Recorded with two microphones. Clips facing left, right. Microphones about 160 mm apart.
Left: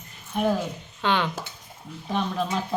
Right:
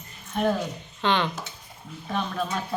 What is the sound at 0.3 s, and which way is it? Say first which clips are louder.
Speech: left 1 dB; 10° left (ahead or behind).